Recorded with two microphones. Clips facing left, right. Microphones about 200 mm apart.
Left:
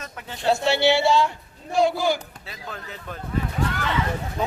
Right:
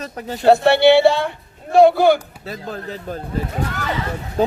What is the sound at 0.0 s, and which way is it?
Speech, 35° right (ahead or behind).